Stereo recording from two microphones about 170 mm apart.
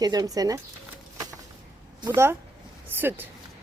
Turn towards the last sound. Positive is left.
turn(degrees=-10)  # may be behind; listen again after turning